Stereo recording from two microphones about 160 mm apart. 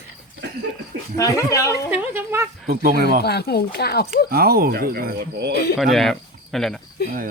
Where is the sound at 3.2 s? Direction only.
90° left.